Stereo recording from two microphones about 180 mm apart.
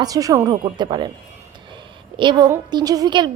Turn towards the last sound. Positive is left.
turn(degrees=-25)  # may be behind; listen again after turning